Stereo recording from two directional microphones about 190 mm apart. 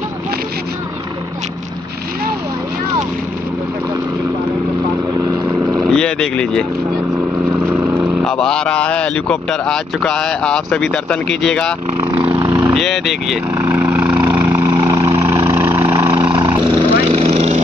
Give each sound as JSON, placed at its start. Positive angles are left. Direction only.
{"t": 5.9, "sound": "vehicle", "side_deg": 5}
{"t": 7.5, "sound": "vehicle", "side_deg": -10}
{"t": 8.2, "sound": "speech", "side_deg": 5}
{"t": 12.4, "sound": "speech", "side_deg": -10}
{"t": 13.6, "sound": "vehicle", "side_deg": -10}
{"t": 14.7, "sound": "vehicle", "side_deg": -20}
{"t": 16.3, "sound": "vehicle", "side_deg": -25}